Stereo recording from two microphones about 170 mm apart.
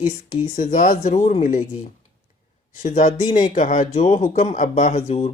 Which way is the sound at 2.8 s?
45° left (ahead or behind).